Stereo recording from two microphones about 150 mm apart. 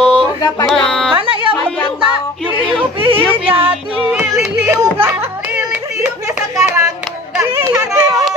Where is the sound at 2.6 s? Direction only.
35° right (ahead or behind).